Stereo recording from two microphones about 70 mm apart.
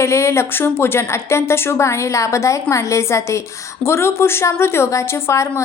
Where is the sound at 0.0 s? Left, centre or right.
Left.